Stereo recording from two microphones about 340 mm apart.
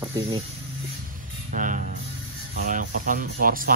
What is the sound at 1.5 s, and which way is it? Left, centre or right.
Speech, right.